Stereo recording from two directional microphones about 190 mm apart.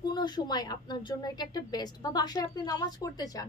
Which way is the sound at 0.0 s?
20° left (ahead or behind).